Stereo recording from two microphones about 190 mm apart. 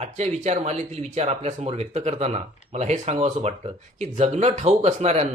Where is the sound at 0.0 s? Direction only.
35° right (ahead or behind).